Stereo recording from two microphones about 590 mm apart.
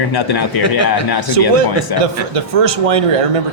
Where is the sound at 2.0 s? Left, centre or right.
Right.